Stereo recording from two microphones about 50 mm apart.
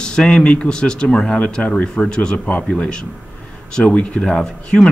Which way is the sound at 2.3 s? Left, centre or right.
Left.